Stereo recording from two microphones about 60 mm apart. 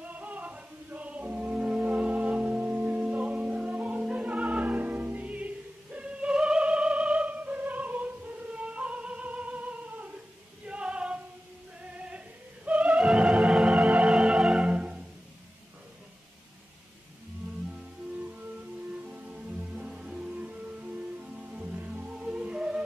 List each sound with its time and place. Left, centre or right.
0.0 s music: right
5.9 s opera: centre
10.7 s female singing: centre
12.6 s music: right
13.5 s theremin: centre
14.7 s music: right
18.2 s music: right
22.0 s music: centre